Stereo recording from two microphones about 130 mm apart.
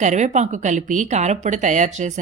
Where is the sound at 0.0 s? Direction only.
65° right (ahead or behind).